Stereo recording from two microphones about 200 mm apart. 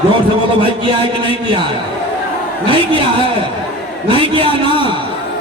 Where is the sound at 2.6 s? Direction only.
25° right (ahead or behind).